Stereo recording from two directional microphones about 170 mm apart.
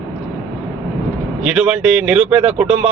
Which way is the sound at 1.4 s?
5° right (ahead or behind).